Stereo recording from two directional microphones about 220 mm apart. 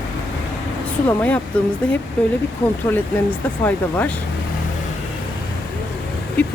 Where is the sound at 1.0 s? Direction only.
5° left (ahead or behind).